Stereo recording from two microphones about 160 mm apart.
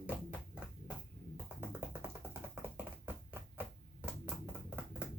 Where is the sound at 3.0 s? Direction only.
10° right (ahead or behind).